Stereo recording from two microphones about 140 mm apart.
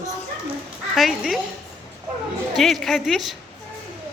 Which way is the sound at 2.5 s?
Centre (ahead or behind).